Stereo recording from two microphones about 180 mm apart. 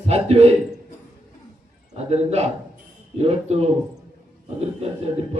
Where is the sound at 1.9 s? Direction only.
35° right (ahead or behind).